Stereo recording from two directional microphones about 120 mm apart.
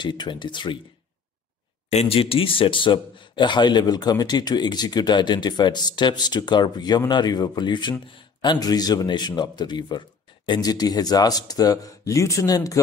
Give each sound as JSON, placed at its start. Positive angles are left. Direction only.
{"t": 0.0, "sound": "speech", "side_deg": 40}
{"t": 1.9, "sound": "speech", "side_deg": 60}